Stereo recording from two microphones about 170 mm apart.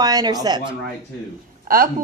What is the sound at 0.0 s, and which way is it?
Speech, 20° right (ahead or behind).